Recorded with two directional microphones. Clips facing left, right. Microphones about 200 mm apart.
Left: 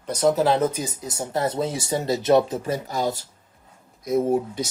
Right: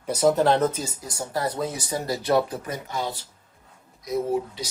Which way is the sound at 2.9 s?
45° left (ahead or behind).